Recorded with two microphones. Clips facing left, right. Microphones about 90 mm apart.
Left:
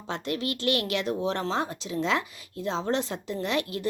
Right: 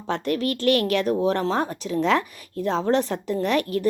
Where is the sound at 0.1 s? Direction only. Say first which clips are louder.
Right 6 dB; 50° right (ahead or behind).